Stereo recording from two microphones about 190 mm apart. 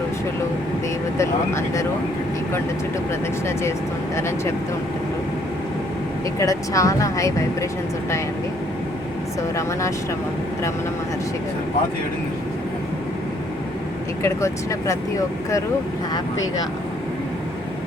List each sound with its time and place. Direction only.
1.2 s speech: 15° left (ahead or behind)
4.1 s speech: 15° left (ahead or behind)
6.4 s speech: 15° left (ahead or behind)
14.2 s speech: 15° left (ahead or behind)